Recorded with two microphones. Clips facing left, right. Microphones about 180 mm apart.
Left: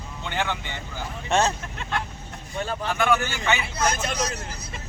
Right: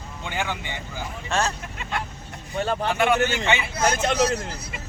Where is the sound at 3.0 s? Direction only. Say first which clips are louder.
Right 1 dB; 20° right (ahead or behind).